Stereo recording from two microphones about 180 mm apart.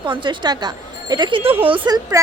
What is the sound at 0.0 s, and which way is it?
Speech, 25° right (ahead or behind).